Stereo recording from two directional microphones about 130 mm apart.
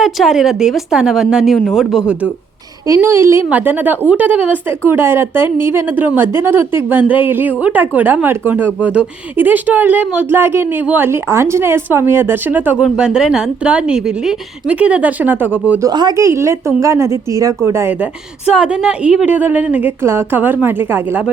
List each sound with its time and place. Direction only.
0.0 s a woman's voice: centre (ahead or behind)
2.8 s speech: 20° right (ahead or behind)
15.8 s speech: 30° right (ahead or behind)
18.5 s speech: 5° right (ahead or behind)